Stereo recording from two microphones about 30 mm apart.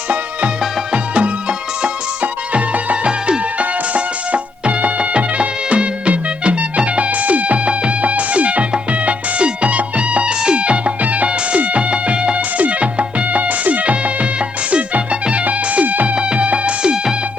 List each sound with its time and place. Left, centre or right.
1.1 s music: right
2.2 s music: right
3.6 s music: right
7.1 s music: right
8.0 s music: right
11.0 s music: right
12.5 s music: right
13.9 s music: right
15.4 s music: right
16.1 s music: right